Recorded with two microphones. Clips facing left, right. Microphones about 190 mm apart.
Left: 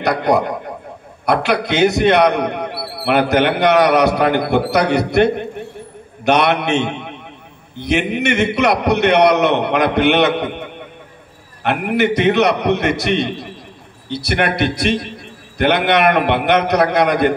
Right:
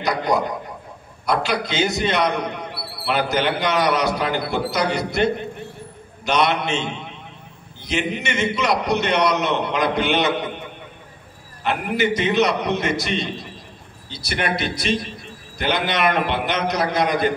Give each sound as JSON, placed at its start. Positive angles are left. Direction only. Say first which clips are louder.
{"t": 0.0, "sound": "a man's voice", "louder": "left 5 dB", "side_deg": 60}